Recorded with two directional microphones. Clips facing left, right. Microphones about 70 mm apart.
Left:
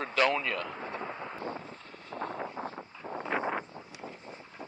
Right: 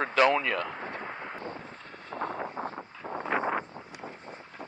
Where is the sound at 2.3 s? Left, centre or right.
Right.